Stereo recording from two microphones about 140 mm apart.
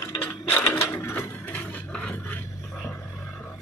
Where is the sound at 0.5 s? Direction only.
15° left (ahead or behind).